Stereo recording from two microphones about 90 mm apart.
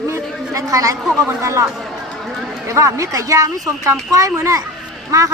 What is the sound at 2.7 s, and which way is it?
A man's voice, 35° right (ahead or behind).